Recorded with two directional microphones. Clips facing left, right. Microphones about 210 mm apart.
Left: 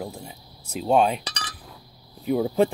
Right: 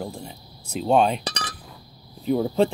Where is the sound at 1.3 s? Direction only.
50° right (ahead or behind).